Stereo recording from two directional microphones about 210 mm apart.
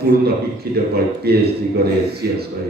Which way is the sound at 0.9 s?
50° right (ahead or behind).